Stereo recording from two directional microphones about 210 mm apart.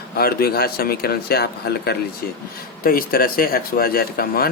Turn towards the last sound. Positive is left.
turn(degrees=45)  # may be behind; listen again after turning